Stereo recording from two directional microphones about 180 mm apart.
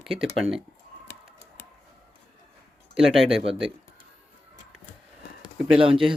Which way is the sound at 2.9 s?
Centre (ahead or behind).